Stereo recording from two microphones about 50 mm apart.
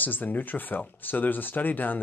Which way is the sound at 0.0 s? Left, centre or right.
Left.